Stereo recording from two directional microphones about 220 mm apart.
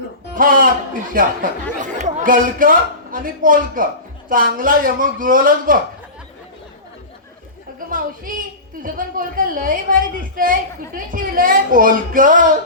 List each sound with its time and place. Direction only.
0.3 s speech: 40° right (ahead or behind)
7.9 s speech: 40° right (ahead or behind)